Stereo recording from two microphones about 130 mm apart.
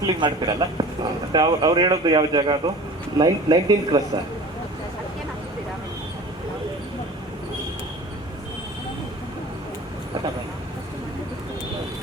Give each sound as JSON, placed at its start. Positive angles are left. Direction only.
{"t": 0.0, "sound": "speech", "side_deg": -35}